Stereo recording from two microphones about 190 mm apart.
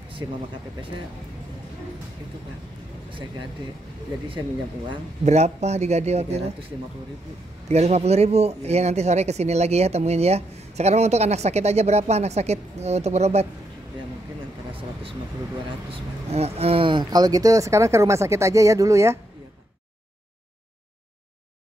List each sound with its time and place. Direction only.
3.1 s speech: 25° right (ahead or behind)
4.8 s speech: 35° right (ahead or behind)
7.6 s speech: 35° right (ahead or behind)
16.3 s speech: 35° right (ahead or behind); by 19.1 s 15° right (ahead or behind)